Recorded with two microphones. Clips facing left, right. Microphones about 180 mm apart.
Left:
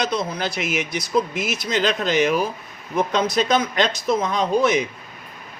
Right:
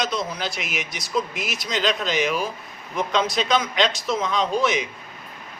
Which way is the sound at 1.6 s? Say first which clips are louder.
Left 2 dB; 55° left (ahead or behind).